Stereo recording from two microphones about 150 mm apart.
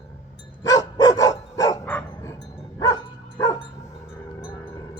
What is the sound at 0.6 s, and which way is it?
Dog, 25° left (ahead or behind).